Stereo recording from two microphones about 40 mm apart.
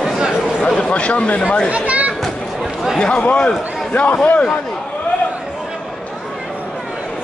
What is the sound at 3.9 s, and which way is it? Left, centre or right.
Speech, left.